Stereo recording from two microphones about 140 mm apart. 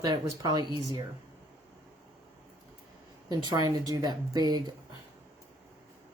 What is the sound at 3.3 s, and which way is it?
Speech, 30° right (ahead or behind).